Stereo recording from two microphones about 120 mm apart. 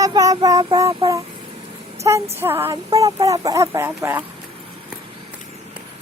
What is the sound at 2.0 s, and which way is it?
Speech, 25° right (ahead or behind).